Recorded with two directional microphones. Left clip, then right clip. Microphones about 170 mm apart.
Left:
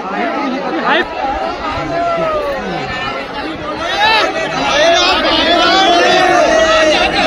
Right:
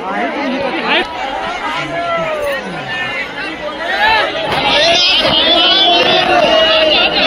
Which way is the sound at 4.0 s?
60° left (ahead or behind).